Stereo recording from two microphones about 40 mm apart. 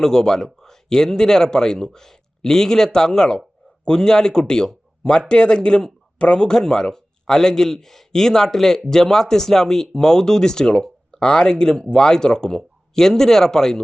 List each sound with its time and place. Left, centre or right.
0.0 s speech: centre